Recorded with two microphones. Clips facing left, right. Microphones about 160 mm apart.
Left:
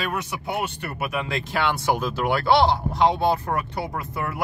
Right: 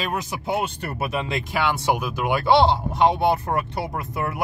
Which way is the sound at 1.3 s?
10° right (ahead or behind).